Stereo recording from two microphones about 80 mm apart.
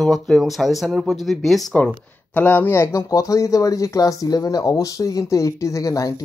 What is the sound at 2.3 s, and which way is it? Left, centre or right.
Speech, left.